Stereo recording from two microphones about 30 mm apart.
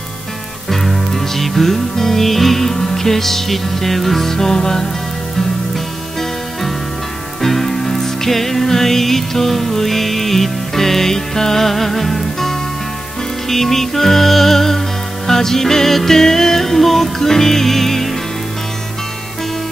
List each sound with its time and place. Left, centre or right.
0.7 s music: centre
4.3 s music: centre
7.4 s music: centre